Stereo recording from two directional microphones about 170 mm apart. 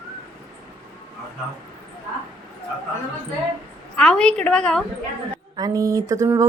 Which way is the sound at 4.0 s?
5° left (ahead or behind).